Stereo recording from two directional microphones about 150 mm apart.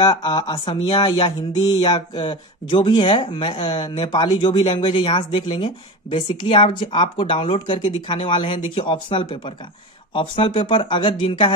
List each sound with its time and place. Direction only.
0.0 s speech: 35° left (ahead or behind)